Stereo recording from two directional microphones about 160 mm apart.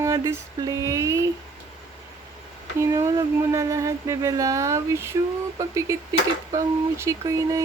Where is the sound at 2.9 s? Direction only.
20° right (ahead or behind).